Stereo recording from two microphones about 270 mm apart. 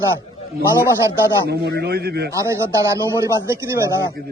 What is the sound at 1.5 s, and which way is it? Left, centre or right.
Speech, right.